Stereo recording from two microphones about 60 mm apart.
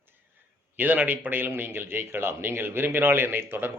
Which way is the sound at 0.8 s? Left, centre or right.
Right.